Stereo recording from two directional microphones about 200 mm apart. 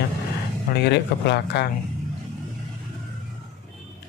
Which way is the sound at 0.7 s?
60° left (ahead or behind).